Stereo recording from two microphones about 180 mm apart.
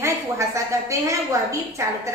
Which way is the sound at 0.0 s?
15° right (ahead or behind).